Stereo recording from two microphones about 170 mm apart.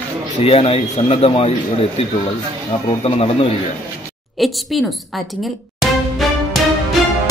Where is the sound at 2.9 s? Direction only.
35° left (ahead or behind).